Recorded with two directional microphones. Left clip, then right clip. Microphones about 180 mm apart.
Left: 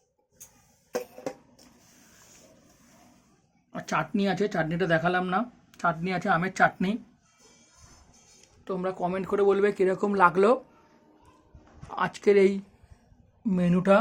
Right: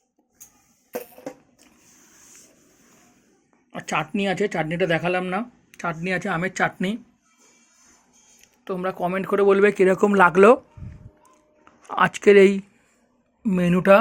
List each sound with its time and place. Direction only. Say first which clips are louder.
3.7 s speech: right 3 dB; 15° right (ahead or behind)
8.4 s speech: right 4 dB; 30° right (ahead or behind)
11.9 s speech: right 8 dB; 35° right (ahead or behind)